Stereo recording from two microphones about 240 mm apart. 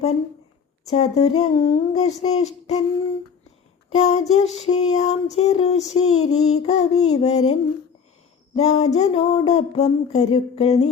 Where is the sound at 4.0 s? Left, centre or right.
Left.